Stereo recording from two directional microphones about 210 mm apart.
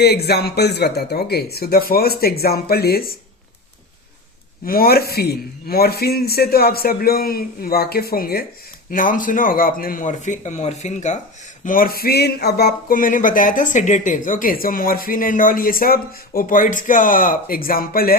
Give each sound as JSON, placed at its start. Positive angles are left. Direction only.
{"t": 0.0, "sound": "a man's voice", "side_deg": 50}
{"t": 4.6, "sound": "a man's voice", "side_deg": 45}